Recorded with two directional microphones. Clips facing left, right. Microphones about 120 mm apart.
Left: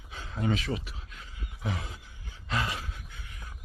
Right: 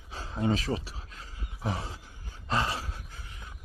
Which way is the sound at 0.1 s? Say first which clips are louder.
Right 3 dB; 35° right (ahead or behind).